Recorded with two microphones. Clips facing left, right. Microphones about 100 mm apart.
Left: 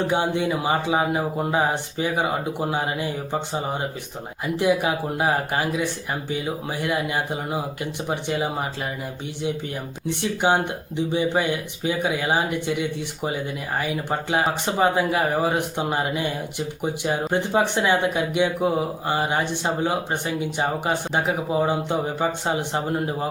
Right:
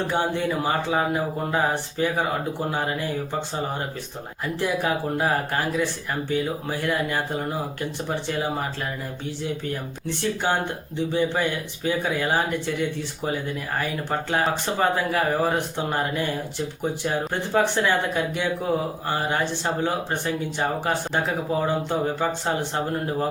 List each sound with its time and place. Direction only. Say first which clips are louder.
0.1 s speech: left 2 dB; 15° left (ahead or behind)
4.4 s speech: left 3 dB; 15° left (ahead or behind)
10.1 s speech: left 3 dB; 15° left (ahead or behind)